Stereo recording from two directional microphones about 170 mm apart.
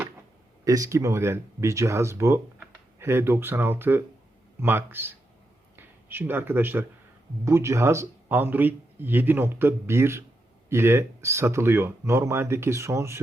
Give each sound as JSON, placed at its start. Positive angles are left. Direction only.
{"t": 0.6, "sound": "speech", "side_deg": -20}